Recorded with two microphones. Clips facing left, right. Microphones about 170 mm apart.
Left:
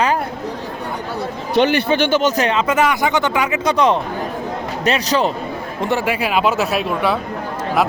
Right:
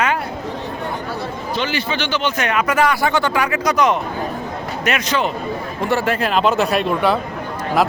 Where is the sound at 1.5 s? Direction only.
60° left (ahead or behind).